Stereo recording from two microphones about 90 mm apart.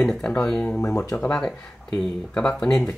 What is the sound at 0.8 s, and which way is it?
Speech, 35° left (ahead or behind).